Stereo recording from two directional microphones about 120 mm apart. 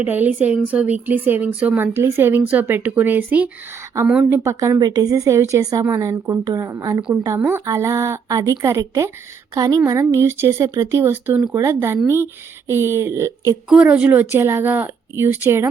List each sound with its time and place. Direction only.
0.0 s speech: 15° right (ahead or behind)
4.3 s speech: 20° right (ahead or behind)
13.8 s speech: 15° right (ahead or behind)